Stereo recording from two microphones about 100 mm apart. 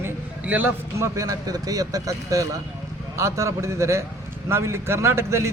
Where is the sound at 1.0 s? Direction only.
35° right (ahead or behind).